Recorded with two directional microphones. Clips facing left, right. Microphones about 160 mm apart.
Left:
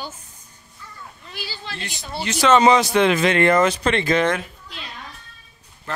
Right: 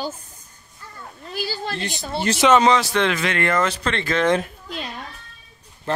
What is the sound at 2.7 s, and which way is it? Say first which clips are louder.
Speech: left 4 dB; 15° left (ahead or behind).